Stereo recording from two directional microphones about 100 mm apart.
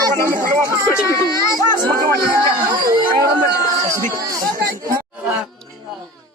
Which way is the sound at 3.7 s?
35° right (ahead or behind).